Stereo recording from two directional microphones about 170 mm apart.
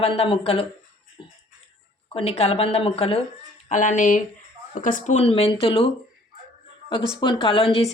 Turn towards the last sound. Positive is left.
turn(degrees=35)  # may be behind; listen again after turning